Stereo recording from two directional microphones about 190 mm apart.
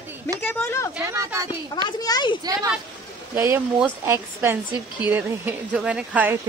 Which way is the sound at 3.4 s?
15° right (ahead or behind).